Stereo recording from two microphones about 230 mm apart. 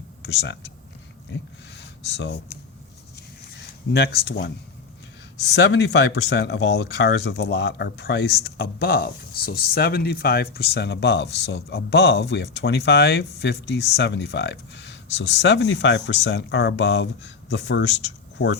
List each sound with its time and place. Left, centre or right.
0.2 s speech: left
1.8 s a sound: left
3.9 s speech: left